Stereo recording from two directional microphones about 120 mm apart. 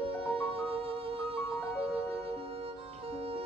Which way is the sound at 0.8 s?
50° right (ahead or behind).